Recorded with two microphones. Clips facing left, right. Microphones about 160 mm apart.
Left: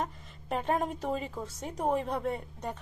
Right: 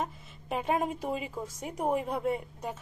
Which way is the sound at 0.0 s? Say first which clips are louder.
Even; 5° right (ahead or behind).